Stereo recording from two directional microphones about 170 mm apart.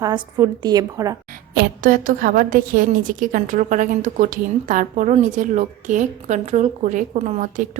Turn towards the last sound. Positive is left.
turn(degrees=-45)  # may be behind; listen again after turning